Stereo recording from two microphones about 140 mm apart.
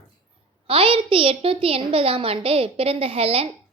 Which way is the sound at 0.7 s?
40° right (ahead or behind).